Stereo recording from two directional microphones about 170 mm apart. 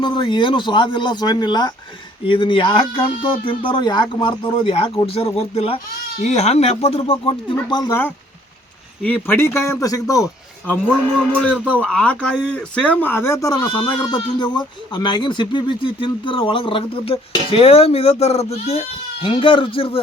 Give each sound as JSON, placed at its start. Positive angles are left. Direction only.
{"t": 0.0, "sound": "speech", "side_deg": 30}
{"t": 7.7, "sound": "speech", "side_deg": 25}
{"t": 9.0, "sound": "a man's voice", "side_deg": 10}
{"t": 11.2, "sound": "a man's voice", "side_deg": 5}